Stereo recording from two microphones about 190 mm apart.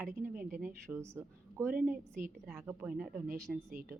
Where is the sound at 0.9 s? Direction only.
15° right (ahead or behind).